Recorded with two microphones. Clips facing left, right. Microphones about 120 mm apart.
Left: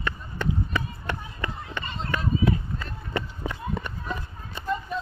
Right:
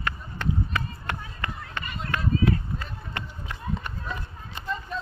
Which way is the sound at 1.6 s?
25° left (ahead or behind).